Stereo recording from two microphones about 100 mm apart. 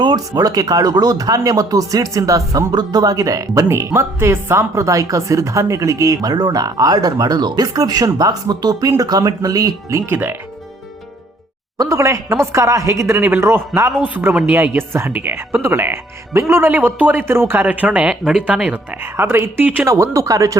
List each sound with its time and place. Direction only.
0.0 s speech: 45° right (ahead or behind)
10.1 s speech: 20° right (ahead or behind)
11.8 s a man's voice: 30° right (ahead or behind)
19.9 s speech: 30° right (ahead or behind)